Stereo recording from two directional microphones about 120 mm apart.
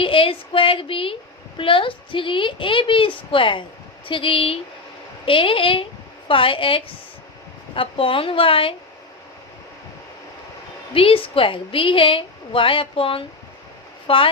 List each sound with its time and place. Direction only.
0.0 s a woman's voice: 50° left (ahead or behind)
10.9 s a woman's voice: 50° left (ahead or behind)